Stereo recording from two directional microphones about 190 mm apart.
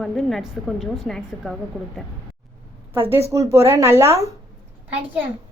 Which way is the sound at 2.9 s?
10° right (ahead or behind).